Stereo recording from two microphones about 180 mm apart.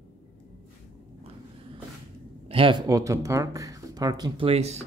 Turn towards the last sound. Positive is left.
turn(degrees=-35)  # may be behind; listen again after turning